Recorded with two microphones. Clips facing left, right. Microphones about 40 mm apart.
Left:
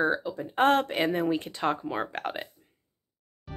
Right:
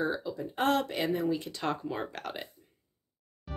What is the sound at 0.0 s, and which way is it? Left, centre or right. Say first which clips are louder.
Speech: left 5 dB; left.